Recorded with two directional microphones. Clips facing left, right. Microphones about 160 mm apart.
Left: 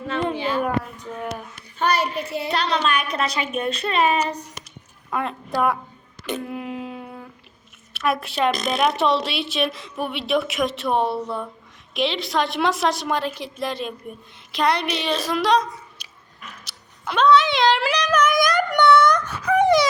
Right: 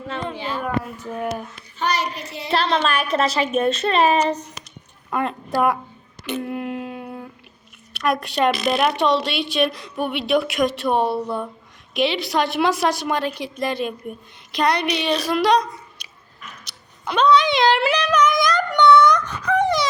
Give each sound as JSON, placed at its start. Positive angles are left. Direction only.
{"t": 0.4, "sound": "a sound", "side_deg": 5}
{"t": 0.9, "sound": "speech", "side_deg": -5}
{"t": 1.8, "sound": "child singing", "side_deg": 55}
{"t": 2.7, "sound": "a child's voice", "side_deg": -35}
{"t": 5.1, "sound": "a woman's voice", "side_deg": 0}
{"t": 6.2, "sound": "a sound", "side_deg": 0}
{"t": 7.9, "sound": "a woman's voice", "side_deg": 0}
{"t": 16.6, "sound": "female singing", "side_deg": 0}